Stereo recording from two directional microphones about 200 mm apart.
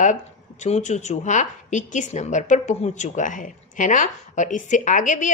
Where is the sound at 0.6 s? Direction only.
35° left (ahead or behind).